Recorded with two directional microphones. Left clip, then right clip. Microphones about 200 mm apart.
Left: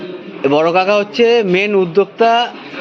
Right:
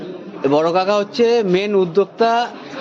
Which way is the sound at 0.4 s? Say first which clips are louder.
Left 3 dB; 10° left (ahead or behind).